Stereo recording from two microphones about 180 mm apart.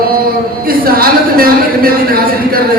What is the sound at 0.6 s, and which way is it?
Speech, 55° right (ahead or behind).